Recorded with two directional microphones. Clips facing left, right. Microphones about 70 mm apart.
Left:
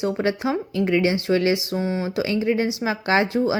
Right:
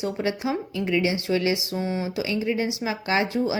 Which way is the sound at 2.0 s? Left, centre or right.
Left.